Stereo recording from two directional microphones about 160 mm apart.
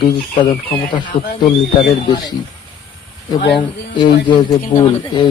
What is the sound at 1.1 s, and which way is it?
Speech, 65° left (ahead or behind).